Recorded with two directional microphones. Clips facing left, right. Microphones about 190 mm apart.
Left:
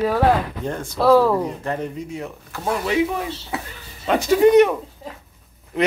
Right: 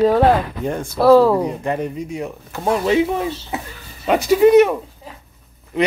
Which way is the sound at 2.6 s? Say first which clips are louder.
Right 4 dB; 25° right (ahead or behind).